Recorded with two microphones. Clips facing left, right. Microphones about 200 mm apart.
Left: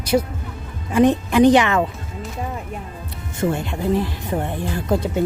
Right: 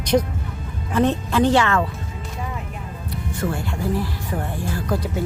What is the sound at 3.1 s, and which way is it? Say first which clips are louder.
Speech: left 4 dB; 25° left (ahead or behind).